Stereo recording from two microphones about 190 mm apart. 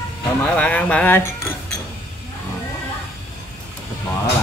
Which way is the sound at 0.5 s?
5° left (ahead or behind).